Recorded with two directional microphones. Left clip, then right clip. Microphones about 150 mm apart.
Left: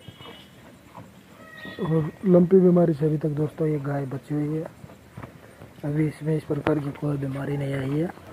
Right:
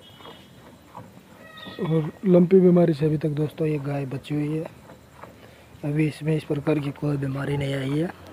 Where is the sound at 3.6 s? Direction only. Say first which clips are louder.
Left 1 dB; 20° right (ahead or behind).